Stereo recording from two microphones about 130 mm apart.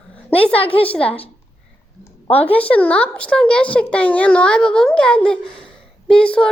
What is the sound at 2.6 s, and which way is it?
A child's voice, 10° left (ahead or behind).